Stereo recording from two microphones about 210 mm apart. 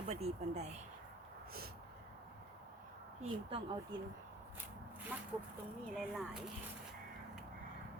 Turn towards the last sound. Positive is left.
turn(degrees=0)  # may be behind; listen again after turning